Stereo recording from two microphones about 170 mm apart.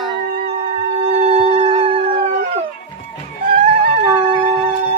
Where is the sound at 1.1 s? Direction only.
40° right (ahead or behind).